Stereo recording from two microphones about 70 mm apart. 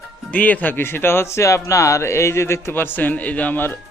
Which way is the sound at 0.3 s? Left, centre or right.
Left.